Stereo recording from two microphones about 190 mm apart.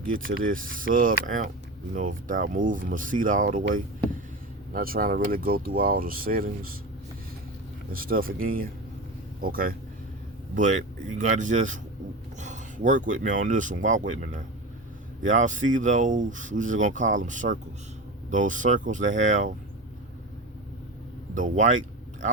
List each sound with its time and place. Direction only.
0.3 s speech: 45° right (ahead or behind)
4.7 s speech: 50° right (ahead or behind)
7.9 s speech: 50° right (ahead or behind)
21.3 s speech: 40° right (ahead or behind)